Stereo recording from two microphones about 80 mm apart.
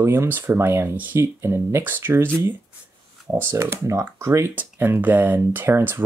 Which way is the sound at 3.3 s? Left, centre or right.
Right.